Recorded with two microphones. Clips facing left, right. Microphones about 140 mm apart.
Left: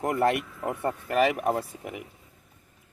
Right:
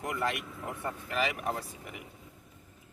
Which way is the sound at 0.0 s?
55° left (ahead or behind).